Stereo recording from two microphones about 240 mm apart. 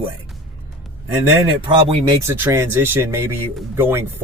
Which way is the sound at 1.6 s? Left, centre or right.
Right.